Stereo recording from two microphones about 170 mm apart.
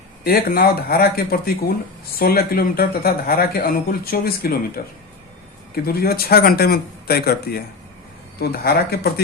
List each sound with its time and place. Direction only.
0.3 s speech: 65° left (ahead or behind)